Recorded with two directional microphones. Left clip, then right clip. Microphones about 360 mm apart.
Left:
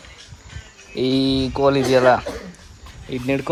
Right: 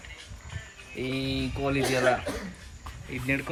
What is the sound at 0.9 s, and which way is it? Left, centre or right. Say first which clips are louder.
Speech: left 12 dB; left.